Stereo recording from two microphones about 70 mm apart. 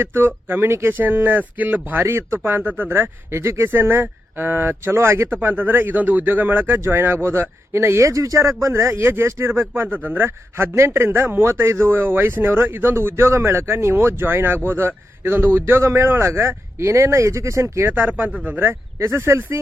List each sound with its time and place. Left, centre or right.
0.0 s a man's voice: right
0.9 s a man's voice: right
17.9 s speech: right
18.9 s speech: right